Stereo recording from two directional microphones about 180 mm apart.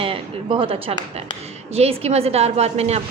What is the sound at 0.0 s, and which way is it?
A woman's voice, 30° right (ahead or behind).